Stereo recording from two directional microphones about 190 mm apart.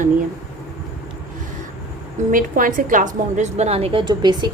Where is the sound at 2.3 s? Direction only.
45° right (ahead or behind).